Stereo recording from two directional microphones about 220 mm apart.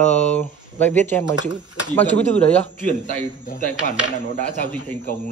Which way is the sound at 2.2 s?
30° left (ahead or behind).